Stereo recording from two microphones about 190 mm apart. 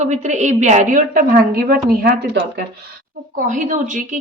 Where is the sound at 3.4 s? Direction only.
45° right (ahead or behind).